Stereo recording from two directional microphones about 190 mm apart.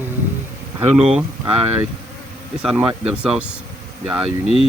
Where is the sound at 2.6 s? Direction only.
5° right (ahead or behind).